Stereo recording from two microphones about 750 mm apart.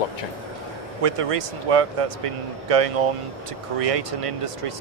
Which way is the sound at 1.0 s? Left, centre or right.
Right.